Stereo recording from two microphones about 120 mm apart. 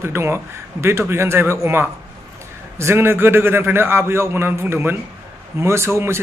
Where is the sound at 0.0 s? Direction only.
20° right (ahead or behind).